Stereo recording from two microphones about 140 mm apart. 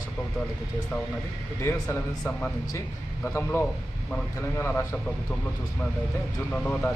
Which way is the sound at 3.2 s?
15° left (ahead or behind).